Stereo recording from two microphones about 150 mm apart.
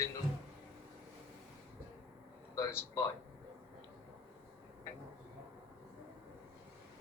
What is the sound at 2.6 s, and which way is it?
Speech, 20° left (ahead or behind).